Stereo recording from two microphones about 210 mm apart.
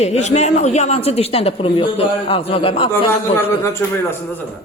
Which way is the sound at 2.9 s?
10° left (ahead or behind).